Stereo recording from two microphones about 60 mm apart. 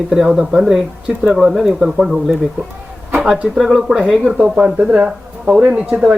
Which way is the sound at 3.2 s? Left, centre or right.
Centre.